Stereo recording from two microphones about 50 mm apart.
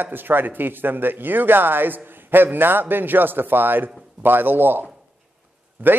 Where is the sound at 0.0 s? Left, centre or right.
Right.